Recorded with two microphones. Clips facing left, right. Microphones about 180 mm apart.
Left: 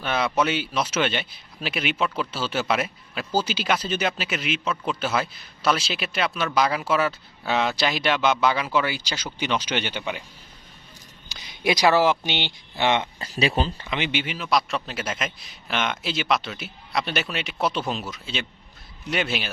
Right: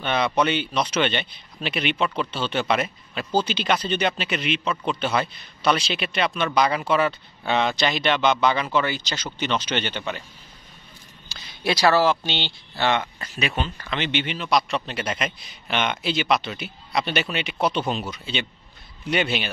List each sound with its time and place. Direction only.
0.0 s speech: 5° left (ahead or behind)
11.2 s speech: 15° left (ahead or behind)
13.2 s speech: 30° left (ahead or behind)
13.8 s speech: 10° left (ahead or behind)